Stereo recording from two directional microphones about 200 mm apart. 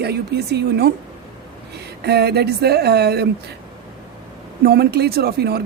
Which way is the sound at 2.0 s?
55° right (ahead or behind).